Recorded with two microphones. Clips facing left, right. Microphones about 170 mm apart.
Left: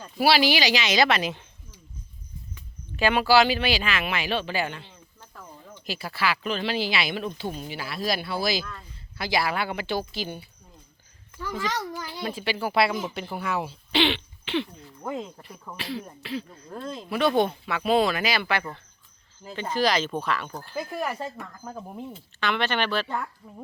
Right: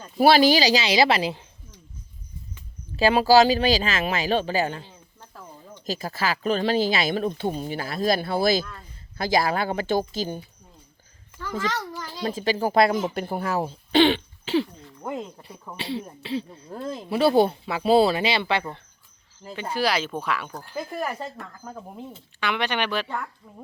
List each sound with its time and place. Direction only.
0.3 s speech: 45° right (ahead or behind); by 1.5 s 30° right (ahead or behind)
2.9 s speech: 35° right (ahead or behind)
11.3 s a child's voice: 10° left (ahead or behind)
12.2 s speech: 40° right (ahead or behind)
15.0 s speech: centre (ahead or behind)
15.7 s speech: 30° right (ahead or behind)
16.7 s speech: 10° right (ahead or behind)
17.1 s speech: 35° right (ahead or behind)
19.4 s speech: 5° right (ahead or behind)
20.7 s speech: centre (ahead or behind)
22.4 s speech: 10° right (ahead or behind)